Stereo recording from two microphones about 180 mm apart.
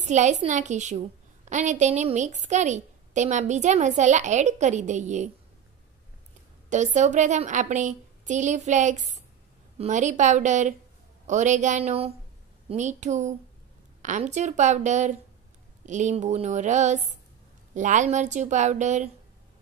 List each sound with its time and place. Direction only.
0.0 s a woman's voice: 40° right (ahead or behind)
6.7 s a woman's voice: 40° right (ahead or behind)